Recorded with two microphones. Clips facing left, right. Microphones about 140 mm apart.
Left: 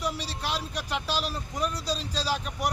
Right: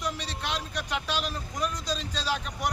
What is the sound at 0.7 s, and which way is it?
Speech, 35° left (ahead or behind).